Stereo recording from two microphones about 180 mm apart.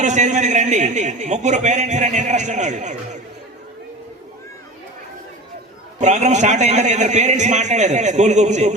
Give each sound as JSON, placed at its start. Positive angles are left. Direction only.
{"t": 0.0, "sound": "a man's voice", "side_deg": -40}
{"t": 6.0, "sound": "a man's voice", "side_deg": -40}